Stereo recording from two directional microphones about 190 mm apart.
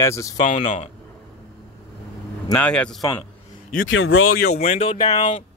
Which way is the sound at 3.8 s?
90° left.